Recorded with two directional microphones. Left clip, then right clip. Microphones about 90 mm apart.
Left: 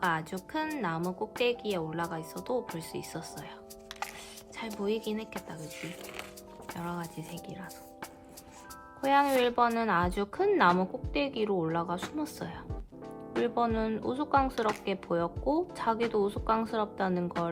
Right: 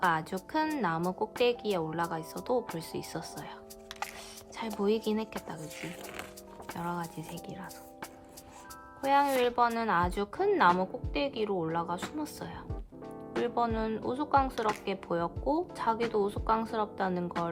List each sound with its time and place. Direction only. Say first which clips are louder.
0.1 s a woman's voice: right 2 dB; 30° right (ahead or behind)
4.5 s a woman's voice: right 3 dB; 35° right (ahead or behind)
5.7 s speech: even; 50° right (ahead or behind)
6.7 s a woman's voice: right 3 dB; 30° right (ahead or behind)
9.0 s speech: left 1 dB; 5° right (ahead or behind)
9.8 s a woman's voice: even; 25° right (ahead or behind)
13.1 s music: left 1 dB; centre (ahead or behind)
13.5 s a woman's voice: even; 20° right (ahead or behind)
14.4 s speech: left 1 dB; centre (ahead or behind)
14.8 s a woman's voice: left 1 dB; 25° right (ahead or behind)